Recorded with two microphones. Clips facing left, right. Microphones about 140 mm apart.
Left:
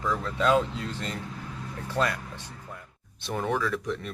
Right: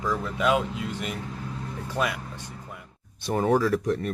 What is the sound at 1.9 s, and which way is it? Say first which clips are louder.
Music: left 1 dB; 10° right (ahead or behind).